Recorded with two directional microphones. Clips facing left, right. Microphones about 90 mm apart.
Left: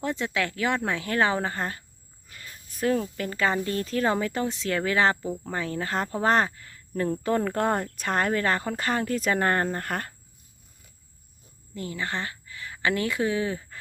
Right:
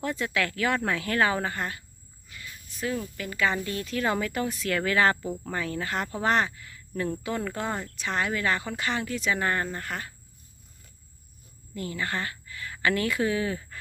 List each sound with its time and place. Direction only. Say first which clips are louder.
0.0 s speech: left 1 dB; 25° left (ahead or behind); by 10.2 s 50° left (ahead or behind)
11.7 s a woman's voice: even; 25° left (ahead or behind)